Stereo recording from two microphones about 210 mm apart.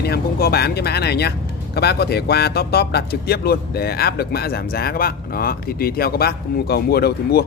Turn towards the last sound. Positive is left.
turn(degrees=50)  # may be behind; listen again after turning